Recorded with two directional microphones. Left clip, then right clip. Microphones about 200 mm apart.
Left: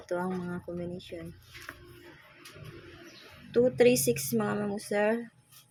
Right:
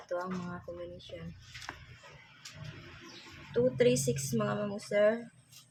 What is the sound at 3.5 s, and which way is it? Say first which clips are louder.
Speech: left 4 dB; 30° left (ahead or behind).